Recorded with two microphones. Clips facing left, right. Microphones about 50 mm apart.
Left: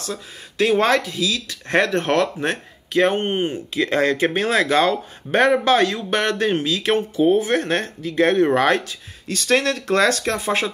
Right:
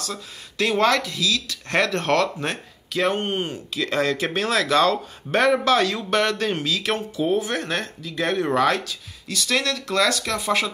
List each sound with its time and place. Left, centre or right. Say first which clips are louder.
0.0 s speech: left 2 dB; left